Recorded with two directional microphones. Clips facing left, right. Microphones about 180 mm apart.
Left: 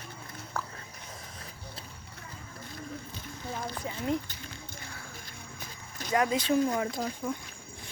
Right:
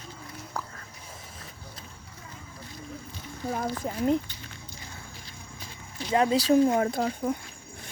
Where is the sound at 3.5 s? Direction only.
45° right (ahead or behind).